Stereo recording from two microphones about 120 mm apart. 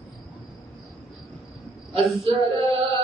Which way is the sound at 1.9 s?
50° right (ahead or behind).